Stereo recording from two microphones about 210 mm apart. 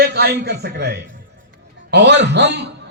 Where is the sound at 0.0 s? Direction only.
50° right (ahead or behind).